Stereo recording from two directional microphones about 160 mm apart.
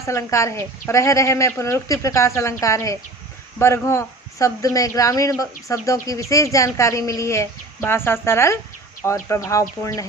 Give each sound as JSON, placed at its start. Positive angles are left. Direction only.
{"t": 0.0, "sound": "a woman's voice", "side_deg": 20}